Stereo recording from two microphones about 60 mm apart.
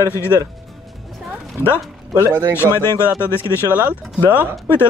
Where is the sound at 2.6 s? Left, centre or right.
Left.